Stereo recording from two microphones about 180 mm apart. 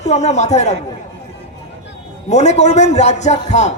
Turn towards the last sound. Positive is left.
turn(degrees=40)  # may be behind; listen again after turning